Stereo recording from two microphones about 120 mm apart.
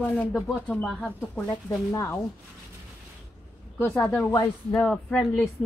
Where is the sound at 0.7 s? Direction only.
5° left (ahead or behind); by 2.1 s 25° left (ahead or behind).